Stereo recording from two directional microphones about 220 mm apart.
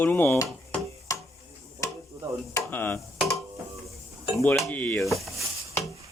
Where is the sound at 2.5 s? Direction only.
10° left (ahead or behind).